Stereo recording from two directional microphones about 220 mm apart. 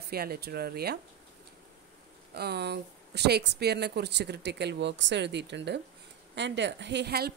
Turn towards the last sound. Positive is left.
turn(degrees=-45)  # may be behind; listen again after turning